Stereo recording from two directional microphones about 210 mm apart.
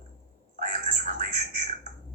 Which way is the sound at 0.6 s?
40° right (ahead or behind).